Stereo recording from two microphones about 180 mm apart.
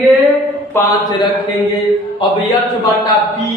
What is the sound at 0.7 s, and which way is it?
Speech, 15° left (ahead or behind).